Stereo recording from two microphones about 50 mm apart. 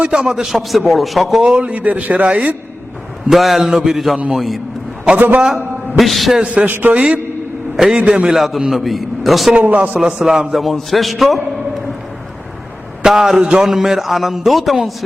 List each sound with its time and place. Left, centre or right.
0.0 s a man's voice: centre
1.4 s a man's voice: right
3.2 s a man's voice: centre
5.1 s a man's voice: right
6.0 s a man's voice: centre
6.4 s a man's voice: right
6.7 s a man's voice: right
7.9 s a man's voice: right
8.3 s a man's voice: centre
9.6 s a man's voice: right
10.0 s a man's voice: centre
10.6 s a man's voice: centre
13.0 s a man's voice: centre